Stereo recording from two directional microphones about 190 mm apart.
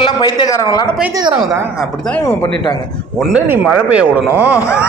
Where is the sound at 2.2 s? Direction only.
20° left (ahead or behind).